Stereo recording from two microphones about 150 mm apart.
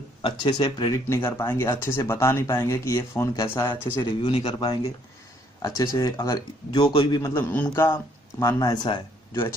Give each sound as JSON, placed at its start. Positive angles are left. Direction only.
{"t": 0.2, "sound": "speech", "side_deg": 35}
{"t": 4.0, "sound": "speech", "side_deg": 30}
{"t": 5.6, "sound": "speech", "side_deg": 25}